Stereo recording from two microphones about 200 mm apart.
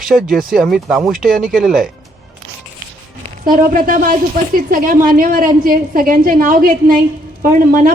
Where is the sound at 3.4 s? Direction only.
45° right (ahead or behind).